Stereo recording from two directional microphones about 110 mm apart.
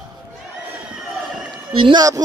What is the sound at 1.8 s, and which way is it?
Speech, 50° right (ahead or behind).